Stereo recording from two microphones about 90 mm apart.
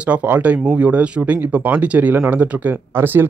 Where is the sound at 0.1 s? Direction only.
15° right (ahead or behind).